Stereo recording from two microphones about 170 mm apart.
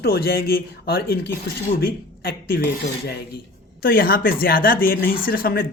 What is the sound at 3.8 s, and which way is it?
Speech, 60° left (ahead or behind).